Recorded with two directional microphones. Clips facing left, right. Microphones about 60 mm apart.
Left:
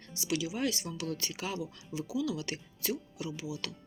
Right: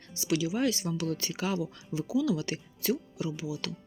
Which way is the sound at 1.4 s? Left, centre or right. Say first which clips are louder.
Right 6 dB; right.